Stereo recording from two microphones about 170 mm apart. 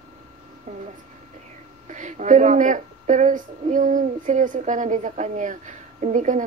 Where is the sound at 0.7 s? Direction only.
40° right (ahead or behind).